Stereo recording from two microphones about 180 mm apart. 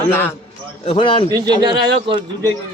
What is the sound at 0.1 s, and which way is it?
Speech, 10° left (ahead or behind).